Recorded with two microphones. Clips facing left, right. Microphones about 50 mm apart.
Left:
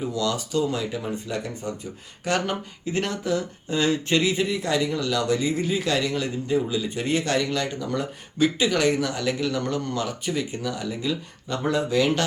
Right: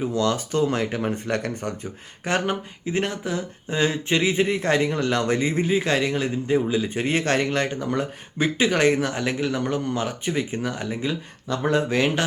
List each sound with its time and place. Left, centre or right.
0.1 s speech: right
2.2 s speech: right